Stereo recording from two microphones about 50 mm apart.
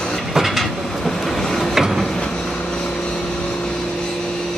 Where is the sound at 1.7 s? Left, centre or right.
Centre.